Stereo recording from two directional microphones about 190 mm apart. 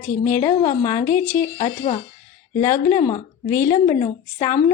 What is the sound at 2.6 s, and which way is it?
A woman's voice, 15° left (ahead or behind).